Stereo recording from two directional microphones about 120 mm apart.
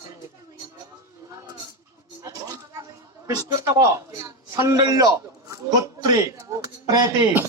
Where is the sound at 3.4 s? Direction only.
25° right (ahead or behind).